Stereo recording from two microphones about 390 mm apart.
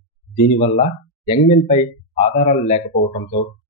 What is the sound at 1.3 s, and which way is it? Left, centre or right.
Speech, centre.